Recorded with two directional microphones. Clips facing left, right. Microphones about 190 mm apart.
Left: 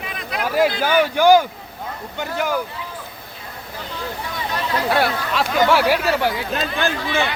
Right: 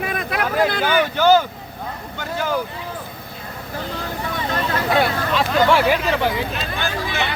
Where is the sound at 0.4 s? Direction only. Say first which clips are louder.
Left 2 dB; 5° left (ahead or behind).